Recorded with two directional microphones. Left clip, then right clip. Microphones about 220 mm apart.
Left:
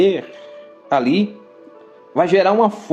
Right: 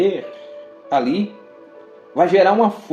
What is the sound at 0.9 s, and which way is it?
A man's voice, 35° left (ahead or behind).